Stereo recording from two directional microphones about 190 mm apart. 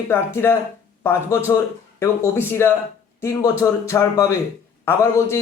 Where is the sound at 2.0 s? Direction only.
15° left (ahead or behind).